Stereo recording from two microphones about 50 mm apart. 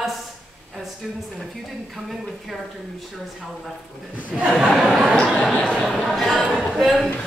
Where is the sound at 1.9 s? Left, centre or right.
Centre.